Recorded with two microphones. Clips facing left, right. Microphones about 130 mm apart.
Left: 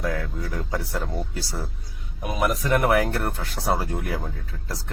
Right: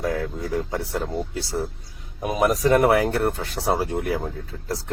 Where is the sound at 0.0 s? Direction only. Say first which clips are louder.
Right 3 dB; 25° right (ahead or behind).